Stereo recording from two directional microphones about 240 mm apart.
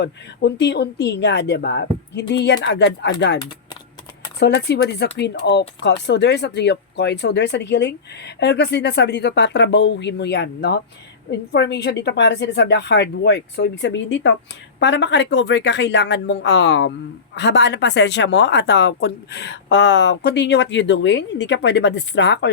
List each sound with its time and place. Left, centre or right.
0.0 s speech: left
4.4 s speech: left